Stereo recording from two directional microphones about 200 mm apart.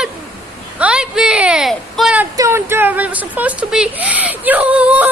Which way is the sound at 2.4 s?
15° right (ahead or behind).